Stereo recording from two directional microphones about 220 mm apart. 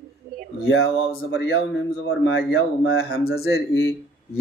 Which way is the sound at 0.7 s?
60° left (ahead or behind).